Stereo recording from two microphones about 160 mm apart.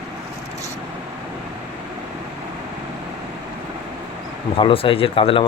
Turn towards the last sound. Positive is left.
turn(degrees=35)  # may be behind; listen again after turning